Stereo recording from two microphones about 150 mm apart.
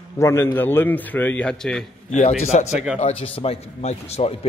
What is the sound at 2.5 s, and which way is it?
A man's voice, 50° left (ahead or behind).